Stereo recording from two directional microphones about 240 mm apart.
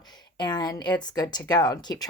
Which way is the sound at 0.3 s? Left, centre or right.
Centre.